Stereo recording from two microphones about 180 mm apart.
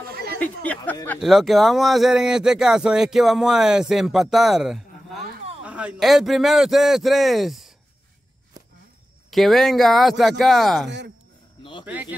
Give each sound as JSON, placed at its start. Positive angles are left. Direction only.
{"t": 0.1, "sound": "a sound", "side_deg": -60}
{"t": 1.2, "sound": "speech", "side_deg": 0}
{"t": 9.3, "sound": "speech", "side_deg": 0}